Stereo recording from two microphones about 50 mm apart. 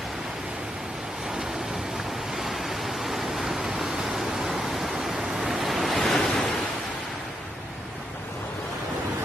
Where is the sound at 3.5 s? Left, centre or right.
Centre.